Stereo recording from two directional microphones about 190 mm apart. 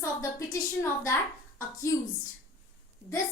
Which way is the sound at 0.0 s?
15° left (ahead or behind).